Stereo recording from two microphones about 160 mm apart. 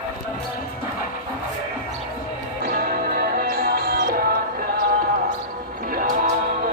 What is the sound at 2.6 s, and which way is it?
Music, 65° right (ahead or behind).